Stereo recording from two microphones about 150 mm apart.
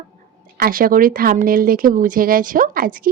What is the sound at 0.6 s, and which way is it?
Speech, 70° right (ahead or behind).